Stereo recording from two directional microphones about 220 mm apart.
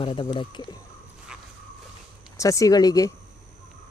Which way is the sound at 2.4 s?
15° left (ahead or behind).